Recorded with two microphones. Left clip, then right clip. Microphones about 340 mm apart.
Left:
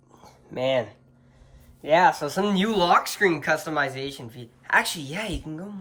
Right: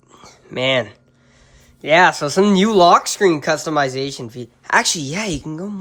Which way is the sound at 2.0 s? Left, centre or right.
Centre.